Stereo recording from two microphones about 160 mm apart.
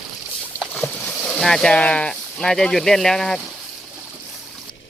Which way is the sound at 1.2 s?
Centre (ahead or behind).